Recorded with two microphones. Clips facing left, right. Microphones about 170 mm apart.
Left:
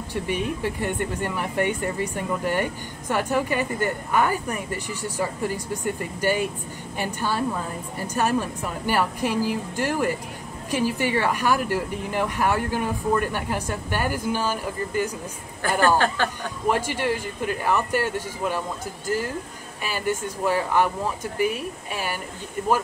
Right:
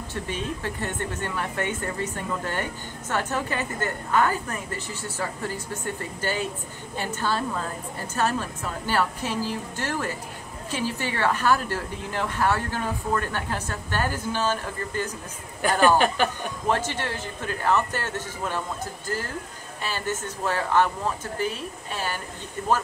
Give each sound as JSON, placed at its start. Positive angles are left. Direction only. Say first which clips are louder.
{"t": 0.1, "sound": "speech", "louder": "left 5 dB", "side_deg": 15}
{"t": 16.0, "sound": "speech", "louder": "right 1 dB", "side_deg": -15}
{"t": 16.6, "sound": "speech", "louder": "left 3 dB", "side_deg": 10}